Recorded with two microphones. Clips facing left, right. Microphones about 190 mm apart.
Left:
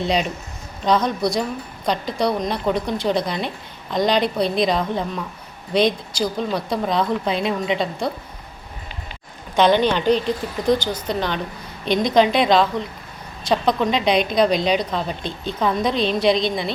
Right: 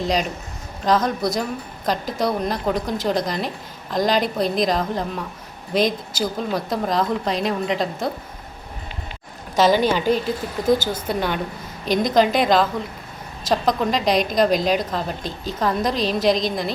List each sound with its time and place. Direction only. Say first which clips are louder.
0.0 s speech: left 1 dB; 40° right (ahead or behind)
0.9 s a woman's voice: left 1 dB; centre (ahead or behind)
9.6 s a woman's voice: left 1 dB; 5° right (ahead or behind)